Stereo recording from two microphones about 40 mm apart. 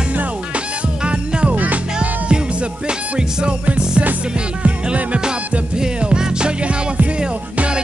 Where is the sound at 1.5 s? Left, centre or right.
Right.